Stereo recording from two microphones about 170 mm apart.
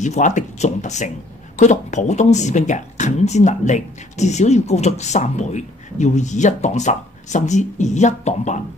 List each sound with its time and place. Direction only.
0.0 s speech: 45° left (ahead or behind)